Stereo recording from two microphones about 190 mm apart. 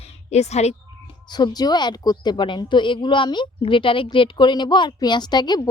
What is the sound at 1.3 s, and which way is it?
Speech, 20° left (ahead or behind).